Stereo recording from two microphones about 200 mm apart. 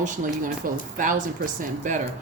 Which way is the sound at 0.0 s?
40° right (ahead or behind).